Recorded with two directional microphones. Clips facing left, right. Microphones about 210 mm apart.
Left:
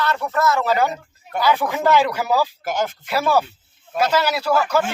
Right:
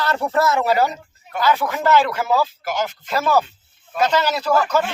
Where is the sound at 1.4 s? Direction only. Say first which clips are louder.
Even; 15° left (ahead or behind).